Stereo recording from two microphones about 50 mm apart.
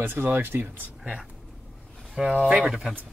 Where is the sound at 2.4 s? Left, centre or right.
Right.